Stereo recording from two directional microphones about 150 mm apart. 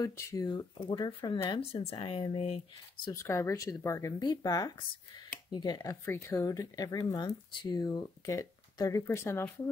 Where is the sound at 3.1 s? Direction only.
20° left (ahead or behind).